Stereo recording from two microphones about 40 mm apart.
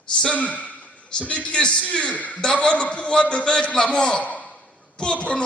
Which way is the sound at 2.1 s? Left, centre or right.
Left.